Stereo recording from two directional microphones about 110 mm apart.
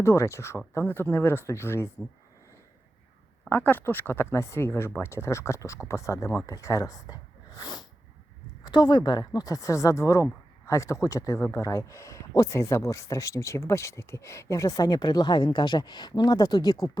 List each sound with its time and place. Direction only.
0.0 s speech: 25° left (ahead or behind)
3.5 s speech: 20° left (ahead or behind); by 17.0 s 35° left (ahead or behind)